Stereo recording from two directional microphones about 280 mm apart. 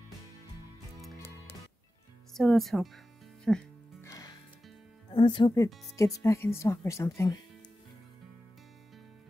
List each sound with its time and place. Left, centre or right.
2.3 s speech: centre
3.4 s music: centre
5.1 s speech: centre